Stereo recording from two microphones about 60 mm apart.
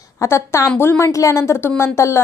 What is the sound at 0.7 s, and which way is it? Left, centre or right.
Speech, left.